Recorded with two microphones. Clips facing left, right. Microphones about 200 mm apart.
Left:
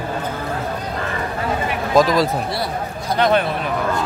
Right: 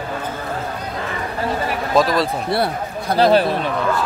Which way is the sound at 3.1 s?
35° right (ahead or behind).